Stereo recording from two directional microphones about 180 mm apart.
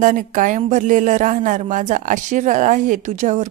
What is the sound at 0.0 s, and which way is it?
Speech, 45° right (ahead or behind).